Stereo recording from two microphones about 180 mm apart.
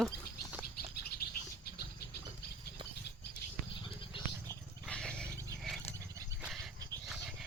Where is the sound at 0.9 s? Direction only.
60° left (ahead or behind).